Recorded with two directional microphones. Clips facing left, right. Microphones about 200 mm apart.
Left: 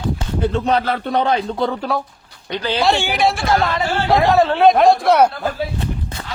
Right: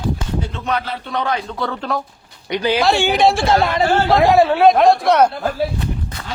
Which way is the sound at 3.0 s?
25° right (ahead or behind).